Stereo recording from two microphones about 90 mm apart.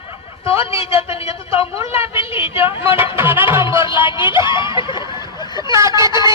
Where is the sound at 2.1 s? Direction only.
75° left (ahead or behind).